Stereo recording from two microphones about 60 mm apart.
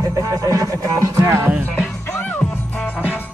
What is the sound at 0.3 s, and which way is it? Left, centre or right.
Speech, right.